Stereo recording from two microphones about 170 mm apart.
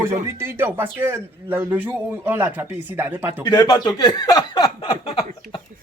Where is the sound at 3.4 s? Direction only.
25° left (ahead or behind).